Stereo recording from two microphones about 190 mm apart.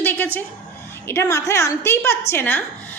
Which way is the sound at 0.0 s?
10° left (ahead or behind).